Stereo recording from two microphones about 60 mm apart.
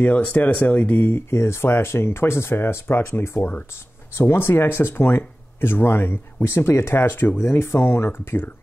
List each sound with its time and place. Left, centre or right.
0.0 s speech: left